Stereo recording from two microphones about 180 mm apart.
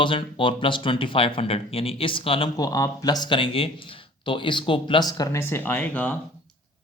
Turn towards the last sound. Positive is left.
turn(degrees=10)  # may be behind; listen again after turning